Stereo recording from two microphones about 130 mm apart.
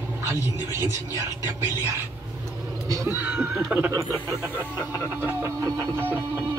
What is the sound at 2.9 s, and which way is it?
Music, 20° right (ahead or behind).